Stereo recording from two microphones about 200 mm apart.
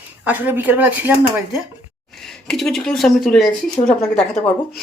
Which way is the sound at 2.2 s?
Centre (ahead or behind).